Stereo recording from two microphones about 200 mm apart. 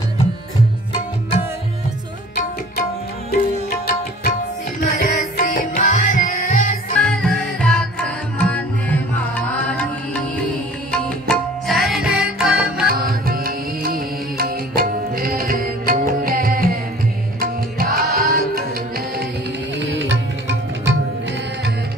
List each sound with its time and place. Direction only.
3.8 s tabla: 45° left (ahead or behind)
7.0 s music: 5° left (ahead or behind)
12.9 s music: 45° right (ahead or behind)
19.8 s music: 60° right (ahead or behind)